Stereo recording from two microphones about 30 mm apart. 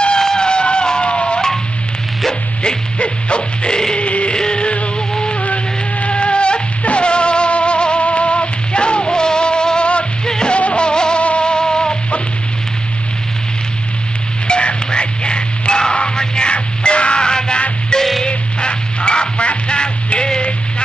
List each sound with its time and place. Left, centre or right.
0.2 s a sound: centre
0.5 s music: left
3.0 s music: left
3.9 s music: left
5.4 s music: left
10.5 s music: left
10.8 s music: left
11.1 s music: left
11.5 s music: left
14.5 s music: left